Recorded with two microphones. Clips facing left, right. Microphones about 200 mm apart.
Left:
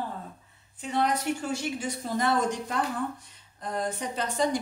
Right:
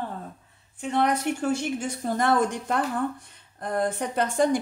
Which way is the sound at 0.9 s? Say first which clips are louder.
Right 3 dB; 55° right (ahead or behind).